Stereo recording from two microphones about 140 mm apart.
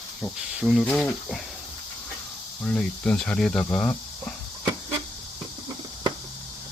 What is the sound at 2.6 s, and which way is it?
Speech, 5° left (ahead or behind).